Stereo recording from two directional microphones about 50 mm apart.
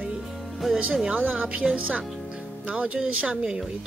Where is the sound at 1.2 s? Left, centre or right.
Right.